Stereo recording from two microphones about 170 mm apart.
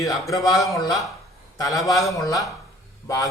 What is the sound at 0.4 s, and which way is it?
A man's voice, 20° left (ahead or behind).